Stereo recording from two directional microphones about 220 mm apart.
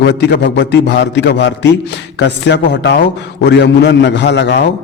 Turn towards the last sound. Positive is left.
turn(degrees=55)  # may be behind; listen again after turning